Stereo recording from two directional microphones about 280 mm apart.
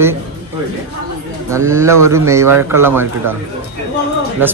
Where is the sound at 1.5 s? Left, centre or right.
Centre.